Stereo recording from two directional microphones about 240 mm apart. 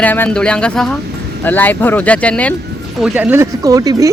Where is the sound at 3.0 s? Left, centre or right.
Centre.